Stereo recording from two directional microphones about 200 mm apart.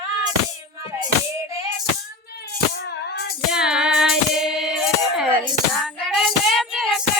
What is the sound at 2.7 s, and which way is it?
Music, 60° left (ahead or behind).